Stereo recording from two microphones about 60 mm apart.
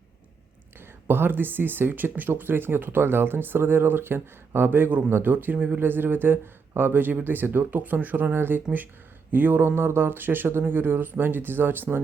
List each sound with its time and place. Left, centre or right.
1.0 s speech: right